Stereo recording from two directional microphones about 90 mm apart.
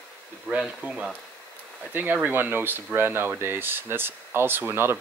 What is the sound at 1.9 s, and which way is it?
Speech, 20° right (ahead or behind).